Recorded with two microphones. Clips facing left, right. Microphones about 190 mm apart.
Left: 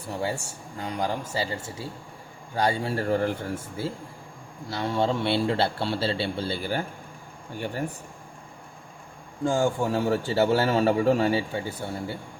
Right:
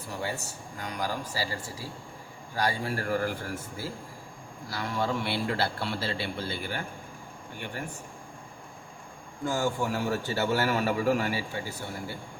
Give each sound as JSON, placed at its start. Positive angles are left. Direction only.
{"t": 0.2, "sound": "speech", "side_deg": 30}
{"t": 9.4, "sound": "speech", "side_deg": 25}